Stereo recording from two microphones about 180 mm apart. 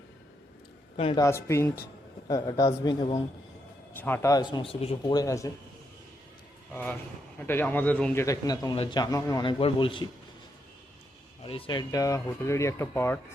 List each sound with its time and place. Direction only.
0.9 s speech: 30° left (ahead or behind)
1.2 s a man's voice: 15° left (ahead or behind)
4.0 s a man's voice: 15° left (ahead or behind); by 5.1 s 35° left (ahead or behind)
5.1 s speech: 20° left (ahead or behind)
7.3 s speech: 10° left (ahead or behind)
8.2 s a man's voice: 20° left (ahead or behind)
11.4 s speech: 30° left (ahead or behind); by 13.1 s 15° left (ahead or behind)